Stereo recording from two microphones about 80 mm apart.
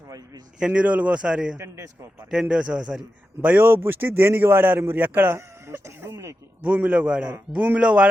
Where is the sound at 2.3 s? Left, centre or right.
Centre; by 6.4 s right.